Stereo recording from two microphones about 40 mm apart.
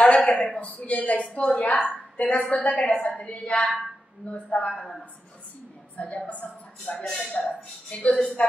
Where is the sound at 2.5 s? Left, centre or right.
Left.